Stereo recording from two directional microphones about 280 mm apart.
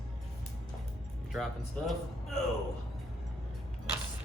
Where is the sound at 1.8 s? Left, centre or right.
Centre.